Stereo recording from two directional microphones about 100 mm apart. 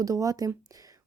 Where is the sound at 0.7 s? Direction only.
35° right (ahead or behind).